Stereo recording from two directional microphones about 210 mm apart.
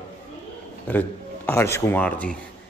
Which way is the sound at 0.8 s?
10° left (ahead or behind).